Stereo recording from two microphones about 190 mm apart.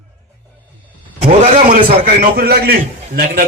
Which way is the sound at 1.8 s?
30° right (ahead or behind).